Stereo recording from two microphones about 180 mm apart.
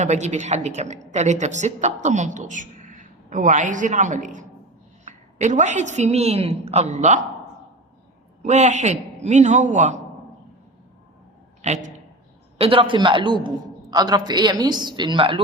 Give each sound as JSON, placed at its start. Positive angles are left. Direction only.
{"t": 0.0, "sound": "a woman's voice", "side_deg": -40}
{"t": 8.4, "sound": "a woman's voice", "side_deg": -40}
{"t": 11.6, "sound": "a man's voice", "side_deg": -40}